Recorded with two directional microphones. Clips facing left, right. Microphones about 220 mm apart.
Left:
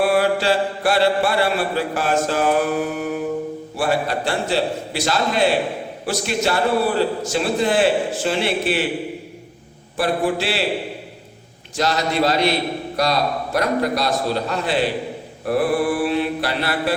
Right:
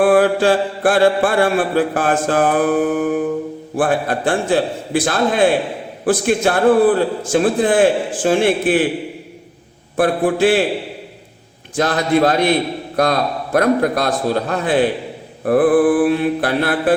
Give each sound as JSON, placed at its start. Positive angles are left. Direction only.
{"t": 0.0, "sound": "mantra", "side_deg": -50}
{"t": 10.0, "sound": "mantra", "side_deg": -50}
{"t": 11.8, "sound": "mantra", "side_deg": -50}